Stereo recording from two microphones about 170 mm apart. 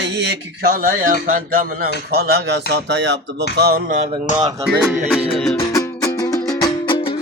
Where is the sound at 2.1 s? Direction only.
70° right (ahead or behind); by 3.5 s 90° right.